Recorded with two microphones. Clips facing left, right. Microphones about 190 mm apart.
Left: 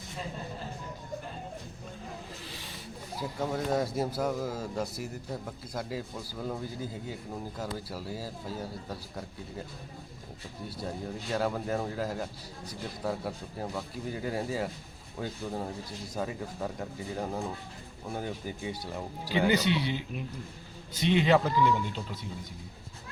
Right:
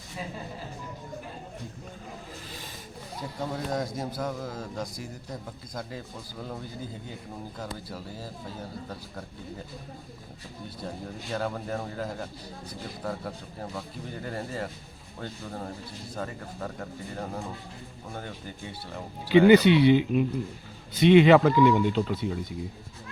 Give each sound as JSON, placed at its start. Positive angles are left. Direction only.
{"t": 3.2, "sound": "a man's voice", "side_deg": 5}
{"t": 10.8, "sound": "a man's voice", "side_deg": 5}
{"t": 19.5, "sound": "speech", "side_deg": -65}